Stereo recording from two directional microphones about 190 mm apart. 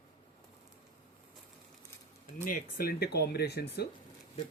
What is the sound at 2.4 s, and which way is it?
Speech, 50° left (ahead or behind).